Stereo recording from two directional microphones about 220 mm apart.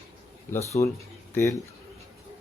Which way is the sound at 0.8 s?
15° left (ahead or behind).